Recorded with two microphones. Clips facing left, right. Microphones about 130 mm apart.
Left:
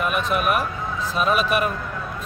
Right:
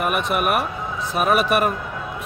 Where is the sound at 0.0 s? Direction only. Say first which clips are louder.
Right 1 dB; 60° right (ahead or behind).